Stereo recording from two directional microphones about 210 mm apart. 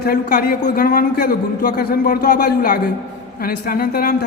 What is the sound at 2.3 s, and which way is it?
Speech, 50° left (ahead or behind).